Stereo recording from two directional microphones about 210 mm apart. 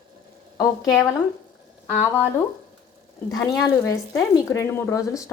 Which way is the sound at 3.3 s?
15° left (ahead or behind).